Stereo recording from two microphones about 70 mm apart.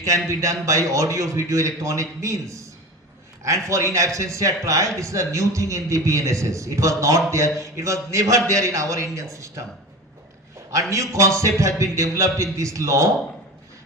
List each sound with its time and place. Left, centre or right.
0.3 s a man's voice: right
10.7 s a man's voice: right